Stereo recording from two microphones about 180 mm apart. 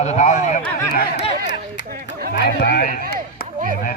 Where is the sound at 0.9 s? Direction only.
60° left (ahead or behind).